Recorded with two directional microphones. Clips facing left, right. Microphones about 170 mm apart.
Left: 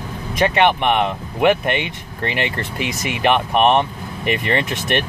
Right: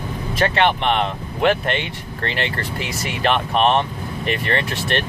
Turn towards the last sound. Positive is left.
turn(degrees=20)  # may be behind; listen again after turning